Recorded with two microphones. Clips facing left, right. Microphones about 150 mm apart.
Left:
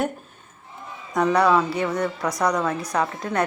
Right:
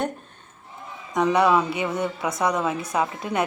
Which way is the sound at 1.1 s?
Centre (ahead or behind).